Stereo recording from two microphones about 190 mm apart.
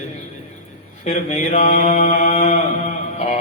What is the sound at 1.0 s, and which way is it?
Mantra, 35° left (ahead or behind).